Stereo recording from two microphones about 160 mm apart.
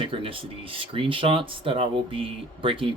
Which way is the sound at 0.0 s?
35° right (ahead or behind).